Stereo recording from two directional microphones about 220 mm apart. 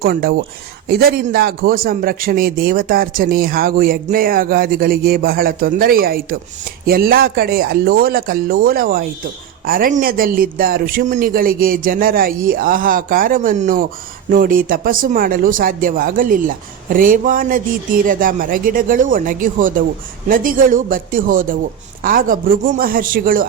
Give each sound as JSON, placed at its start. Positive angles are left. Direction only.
{"t": 0.0, "sound": "a man's voice", "side_deg": -45}